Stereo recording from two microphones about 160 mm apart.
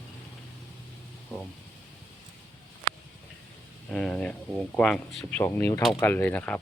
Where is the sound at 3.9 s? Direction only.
5° left (ahead or behind).